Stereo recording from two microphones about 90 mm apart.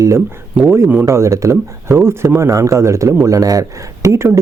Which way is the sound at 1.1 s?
30° right (ahead or behind).